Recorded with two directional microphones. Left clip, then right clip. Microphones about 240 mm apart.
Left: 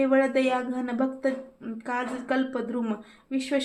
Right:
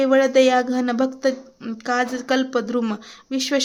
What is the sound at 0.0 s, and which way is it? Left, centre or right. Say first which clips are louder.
Speech: right 7 dB; right.